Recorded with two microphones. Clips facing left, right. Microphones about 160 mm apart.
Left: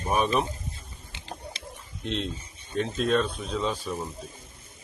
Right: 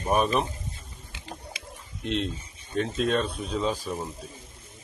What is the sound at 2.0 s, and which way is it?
Speech, centre (ahead or behind).